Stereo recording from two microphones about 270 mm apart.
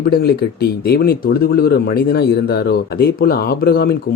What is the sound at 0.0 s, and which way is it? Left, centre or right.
Speech, left.